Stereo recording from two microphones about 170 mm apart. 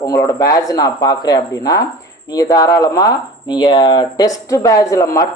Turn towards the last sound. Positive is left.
turn(degrees=20)  # may be behind; listen again after turning